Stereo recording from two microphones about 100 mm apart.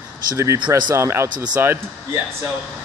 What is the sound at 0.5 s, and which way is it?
Speech, 50° right (ahead or behind).